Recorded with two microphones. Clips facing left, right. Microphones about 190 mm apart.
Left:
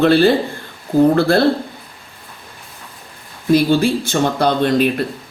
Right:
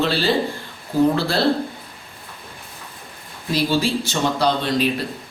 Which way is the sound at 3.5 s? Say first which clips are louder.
Left 6 dB; 55° left (ahead or behind).